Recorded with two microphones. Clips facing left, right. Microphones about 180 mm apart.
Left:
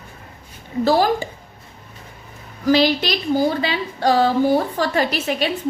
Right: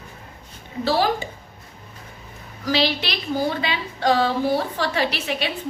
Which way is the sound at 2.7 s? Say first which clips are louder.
Left 6 dB; 45° left (ahead or behind).